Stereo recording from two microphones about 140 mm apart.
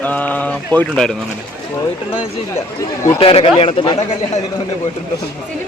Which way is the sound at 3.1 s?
45° left (ahead or behind).